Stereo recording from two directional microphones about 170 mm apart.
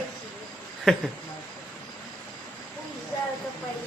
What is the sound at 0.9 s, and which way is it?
Speech, centre (ahead or behind).